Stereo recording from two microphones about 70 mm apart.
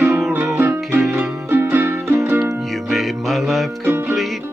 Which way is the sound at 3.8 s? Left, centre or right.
Right.